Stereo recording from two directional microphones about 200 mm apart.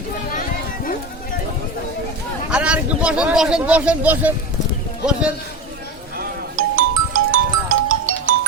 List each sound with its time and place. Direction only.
2.5 s speech: 5° right (ahead or behind)
6.6 s music: 90° right